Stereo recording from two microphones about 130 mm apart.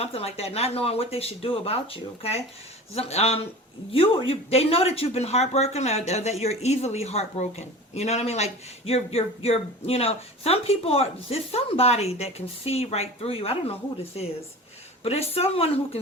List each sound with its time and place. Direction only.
0.0 s speech: 50° left (ahead or behind)